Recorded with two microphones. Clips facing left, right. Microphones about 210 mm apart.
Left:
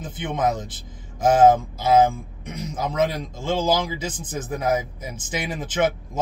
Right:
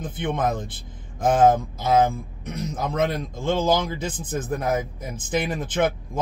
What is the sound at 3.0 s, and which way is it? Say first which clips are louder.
Speech: left 1 dB; 55° right (ahead or behind).